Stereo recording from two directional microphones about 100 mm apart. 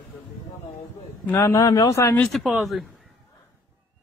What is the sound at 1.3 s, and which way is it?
Speech, 30° left (ahead or behind).